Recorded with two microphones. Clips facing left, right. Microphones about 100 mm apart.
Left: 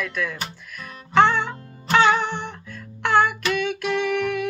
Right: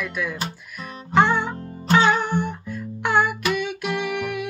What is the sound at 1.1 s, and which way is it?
Music, 10° right (ahead or behind).